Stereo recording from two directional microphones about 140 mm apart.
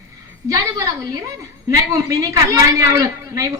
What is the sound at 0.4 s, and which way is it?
Speech, 25° right (ahead or behind).